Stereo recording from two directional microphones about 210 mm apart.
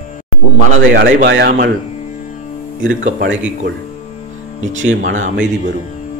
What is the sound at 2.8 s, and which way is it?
Speech, 65° right (ahead or behind).